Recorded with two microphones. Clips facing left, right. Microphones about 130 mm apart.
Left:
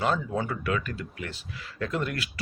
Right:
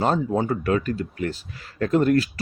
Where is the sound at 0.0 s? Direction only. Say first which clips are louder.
Right 5 dB; 35° right (ahead or behind).